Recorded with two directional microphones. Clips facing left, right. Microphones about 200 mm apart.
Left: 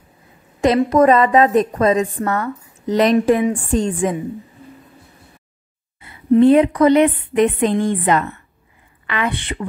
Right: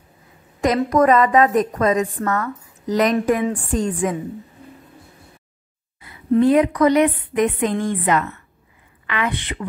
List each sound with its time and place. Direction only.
0.8 s a woman's voice: 25° left (ahead or behind)
6.4 s a woman's voice: 25° left (ahead or behind)